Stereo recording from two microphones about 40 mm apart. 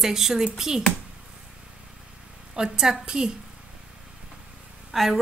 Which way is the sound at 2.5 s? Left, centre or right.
Centre.